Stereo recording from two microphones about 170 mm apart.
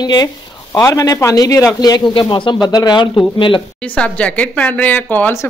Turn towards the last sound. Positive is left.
turn(degrees=10)  # may be behind; listen again after turning